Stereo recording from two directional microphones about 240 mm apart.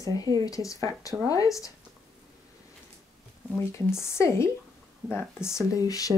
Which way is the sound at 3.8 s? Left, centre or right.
Centre.